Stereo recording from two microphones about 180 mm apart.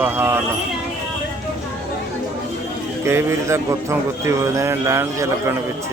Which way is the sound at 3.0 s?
15° right (ahead or behind).